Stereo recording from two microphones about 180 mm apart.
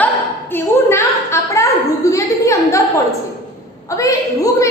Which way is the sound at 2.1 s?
15° left (ahead or behind).